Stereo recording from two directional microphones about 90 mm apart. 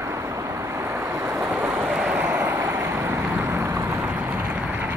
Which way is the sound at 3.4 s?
25° right (ahead or behind).